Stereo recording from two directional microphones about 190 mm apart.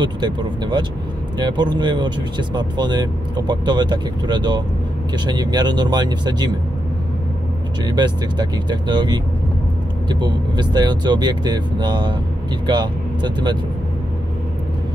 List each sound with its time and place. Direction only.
0.0 s speech: 25° right (ahead or behind)
7.8 s speech: 20° right (ahead or behind)